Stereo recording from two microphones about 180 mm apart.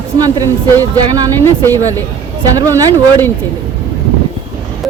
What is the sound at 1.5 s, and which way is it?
Speech, 15° left (ahead or behind).